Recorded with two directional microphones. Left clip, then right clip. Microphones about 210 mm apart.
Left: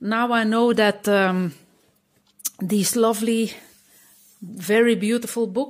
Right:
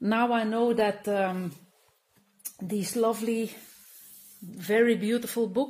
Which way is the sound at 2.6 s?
40° left (ahead or behind).